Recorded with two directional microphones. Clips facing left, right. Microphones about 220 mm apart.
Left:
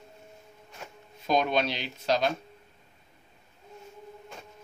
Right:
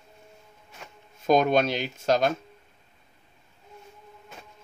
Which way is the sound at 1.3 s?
45° right (ahead or behind).